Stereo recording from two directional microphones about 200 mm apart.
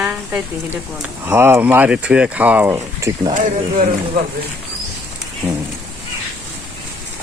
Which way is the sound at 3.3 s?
40° right (ahead or behind).